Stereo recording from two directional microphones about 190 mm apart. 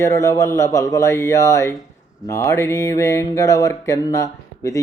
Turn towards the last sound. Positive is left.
turn(degrees=15)  # may be behind; listen again after turning